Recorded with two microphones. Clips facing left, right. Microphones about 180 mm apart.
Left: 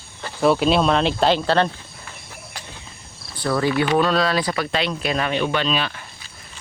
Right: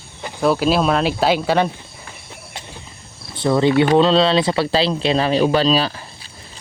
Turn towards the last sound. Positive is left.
turn(degrees=-35)  # may be behind; listen again after turning